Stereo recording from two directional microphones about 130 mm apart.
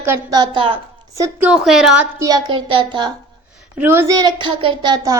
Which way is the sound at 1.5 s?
Centre (ahead or behind).